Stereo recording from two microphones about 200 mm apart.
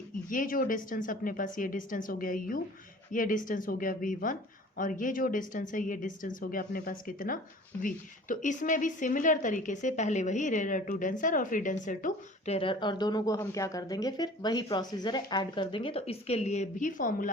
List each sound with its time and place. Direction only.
0.3 s a woman's voice: 45° left (ahead or behind)